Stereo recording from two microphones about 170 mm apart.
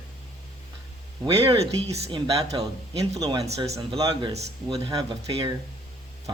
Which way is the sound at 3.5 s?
40° right (ahead or behind).